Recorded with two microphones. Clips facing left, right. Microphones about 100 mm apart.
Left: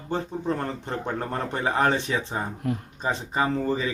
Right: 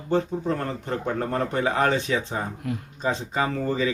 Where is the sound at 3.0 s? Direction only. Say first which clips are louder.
Even; 25° left (ahead or behind).